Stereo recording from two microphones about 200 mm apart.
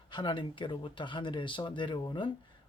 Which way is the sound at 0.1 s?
25° left (ahead or behind).